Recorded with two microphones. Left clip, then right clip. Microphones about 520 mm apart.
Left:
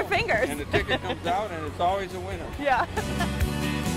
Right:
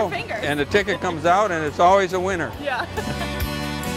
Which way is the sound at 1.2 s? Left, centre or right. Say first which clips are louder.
Right 10 dB; right.